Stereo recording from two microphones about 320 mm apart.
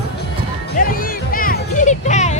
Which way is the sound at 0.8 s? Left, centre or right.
Left.